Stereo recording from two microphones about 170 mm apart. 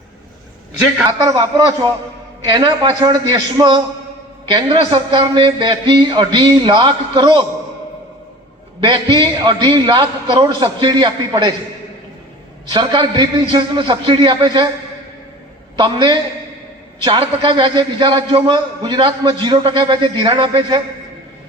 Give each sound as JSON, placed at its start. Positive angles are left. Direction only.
{"t": 1.0, "sound": "a man's voice", "side_deg": -20}
{"t": 8.8, "sound": "a man's voice", "side_deg": -30}
{"t": 12.7, "sound": "a man's voice", "side_deg": -30}
{"t": 15.8, "sound": "a man's voice", "side_deg": -30}